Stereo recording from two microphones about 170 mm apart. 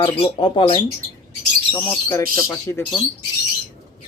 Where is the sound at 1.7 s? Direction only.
20° left (ahead or behind).